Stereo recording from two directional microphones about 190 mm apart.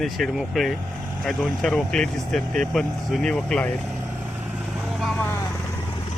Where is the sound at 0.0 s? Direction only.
Centre (ahead or behind).